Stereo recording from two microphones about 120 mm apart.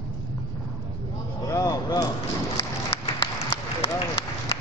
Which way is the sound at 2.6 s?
50° left (ahead or behind).